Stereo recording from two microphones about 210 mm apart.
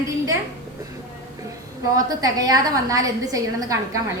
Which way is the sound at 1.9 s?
15° right (ahead or behind).